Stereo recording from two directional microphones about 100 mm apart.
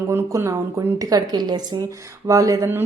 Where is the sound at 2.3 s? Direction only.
35° right (ahead or behind).